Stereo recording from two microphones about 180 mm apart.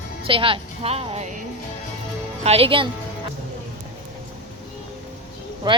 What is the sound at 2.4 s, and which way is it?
Speech, 35° right (ahead or behind).